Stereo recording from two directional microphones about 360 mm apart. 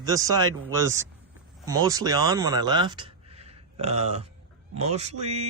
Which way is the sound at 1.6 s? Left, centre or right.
Centre.